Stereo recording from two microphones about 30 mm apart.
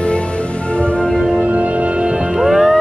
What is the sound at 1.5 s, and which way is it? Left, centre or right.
Music, right.